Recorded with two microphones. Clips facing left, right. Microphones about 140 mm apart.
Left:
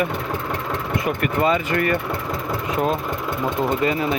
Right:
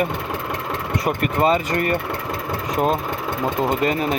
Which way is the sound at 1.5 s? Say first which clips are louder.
Even; 30° right (ahead or behind).